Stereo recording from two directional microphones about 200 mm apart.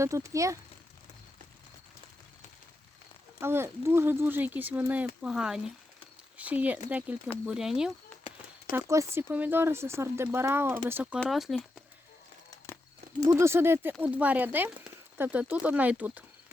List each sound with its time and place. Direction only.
0.0 s speech: 15° right (ahead or behind)
3.4 s speech: 10° right (ahead or behind)
8.3 s a sound: 30° left (ahead or behind)
8.7 s speech: 15° right (ahead or behind)
13.2 s speech: 10° right (ahead or behind)